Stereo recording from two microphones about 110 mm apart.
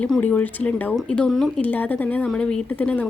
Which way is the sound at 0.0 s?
15° left (ahead or behind).